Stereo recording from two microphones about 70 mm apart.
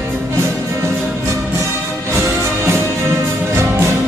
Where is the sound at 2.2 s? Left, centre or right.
Right.